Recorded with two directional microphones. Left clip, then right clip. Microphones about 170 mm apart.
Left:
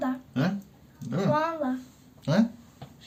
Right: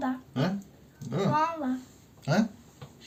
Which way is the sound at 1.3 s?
10° left (ahead or behind).